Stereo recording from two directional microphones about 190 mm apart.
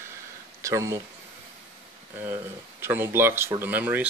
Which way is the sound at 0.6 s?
15° right (ahead or behind).